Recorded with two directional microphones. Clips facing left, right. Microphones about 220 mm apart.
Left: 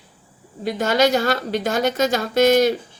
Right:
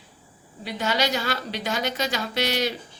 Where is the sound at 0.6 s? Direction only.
45° left (ahead or behind).